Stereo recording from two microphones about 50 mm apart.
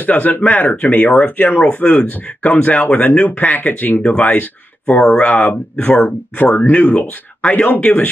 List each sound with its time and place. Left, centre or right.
0.0 s speech: left
5.9 s speech: left
7.4 s speech: left